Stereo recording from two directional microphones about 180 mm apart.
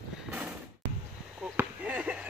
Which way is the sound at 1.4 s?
10° right (ahead or behind).